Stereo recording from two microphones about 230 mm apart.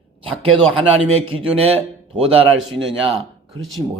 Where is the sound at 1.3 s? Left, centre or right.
Right.